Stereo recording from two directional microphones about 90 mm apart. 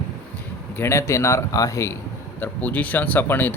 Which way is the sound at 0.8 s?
30° left (ahead or behind).